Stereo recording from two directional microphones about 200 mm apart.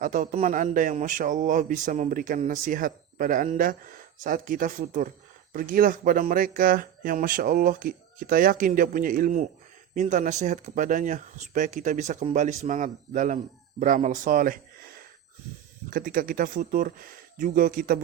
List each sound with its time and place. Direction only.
0.0 s speech: 40° right (ahead or behind)